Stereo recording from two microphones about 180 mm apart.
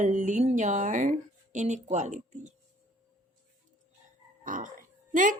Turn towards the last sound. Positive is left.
turn(degrees=-50)  # may be behind; listen again after turning